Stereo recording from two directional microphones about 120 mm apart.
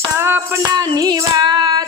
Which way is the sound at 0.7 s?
35° right (ahead or behind).